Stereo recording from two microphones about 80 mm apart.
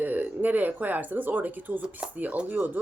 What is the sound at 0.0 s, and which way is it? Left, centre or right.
Speech, right.